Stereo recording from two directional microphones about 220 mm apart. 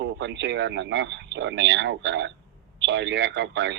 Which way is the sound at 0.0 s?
55° right (ahead or behind).